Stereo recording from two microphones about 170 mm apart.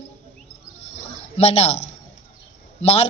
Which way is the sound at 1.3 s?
40° left (ahead or behind).